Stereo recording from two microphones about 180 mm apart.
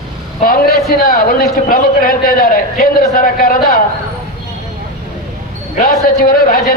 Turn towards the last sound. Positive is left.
turn(degrees=55)  # may be behind; listen again after turning